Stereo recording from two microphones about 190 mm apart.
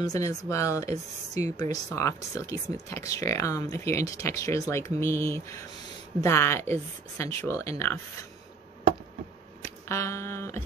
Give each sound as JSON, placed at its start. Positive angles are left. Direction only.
{"t": 0.0, "sound": "speech", "side_deg": 20}
{"t": 9.8, "sound": "speech", "side_deg": 15}